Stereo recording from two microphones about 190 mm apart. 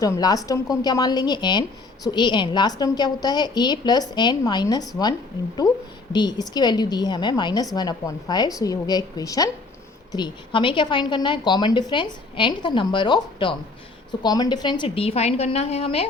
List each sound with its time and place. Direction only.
0.0 s a woman's voice: 20° left (ahead or behind)
6.1 s a woman's voice: 20° left (ahead or behind)